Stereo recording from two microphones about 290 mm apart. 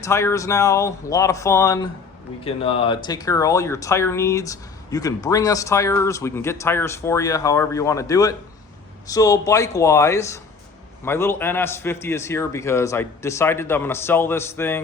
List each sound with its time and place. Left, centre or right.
0.0 s speech: centre